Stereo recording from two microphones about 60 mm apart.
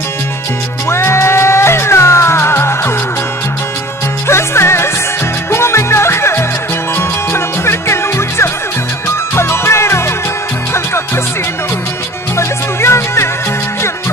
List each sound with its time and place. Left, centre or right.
0.8 s music: left
4.3 s music: left
12.4 s music: left